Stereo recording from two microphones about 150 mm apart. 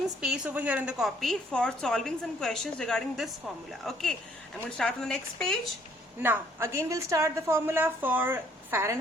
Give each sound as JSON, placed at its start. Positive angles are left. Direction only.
{"t": 0.2, "sound": "a woman's voice", "side_deg": -5}
{"t": 6.2, "sound": "a woman's voice", "side_deg": -15}